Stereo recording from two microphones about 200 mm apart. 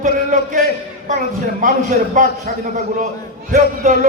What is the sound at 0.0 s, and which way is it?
Speech, 40° right (ahead or behind).